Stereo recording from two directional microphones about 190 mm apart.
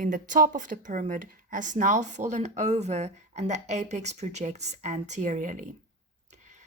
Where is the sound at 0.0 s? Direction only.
45° right (ahead or behind).